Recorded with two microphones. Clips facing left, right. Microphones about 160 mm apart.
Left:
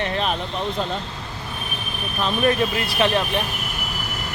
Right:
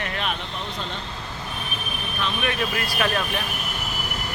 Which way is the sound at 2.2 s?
40° left (ahead or behind).